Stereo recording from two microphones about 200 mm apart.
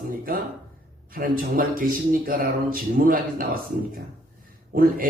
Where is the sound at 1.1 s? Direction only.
45° right (ahead or behind).